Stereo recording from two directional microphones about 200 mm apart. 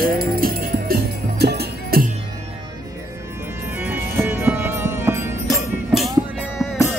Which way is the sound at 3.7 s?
10° right (ahead or behind).